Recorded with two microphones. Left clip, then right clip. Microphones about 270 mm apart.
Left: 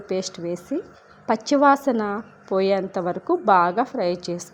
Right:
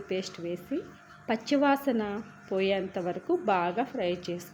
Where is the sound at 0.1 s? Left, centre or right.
Centre.